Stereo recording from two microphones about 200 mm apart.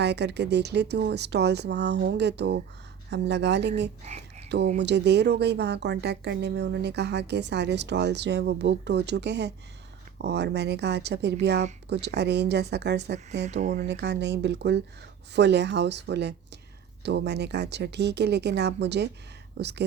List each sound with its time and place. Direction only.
0.0 s speech: 55° right (ahead or behind)
4.0 s a sound: 35° right (ahead or behind)
4.4 s speech: 60° right (ahead or behind)
13.4 s speech: 35° right (ahead or behind)
13.8 s speech: 60° right (ahead or behind)